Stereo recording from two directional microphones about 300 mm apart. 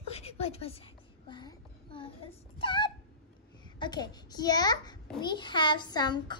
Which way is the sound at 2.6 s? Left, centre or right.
Centre.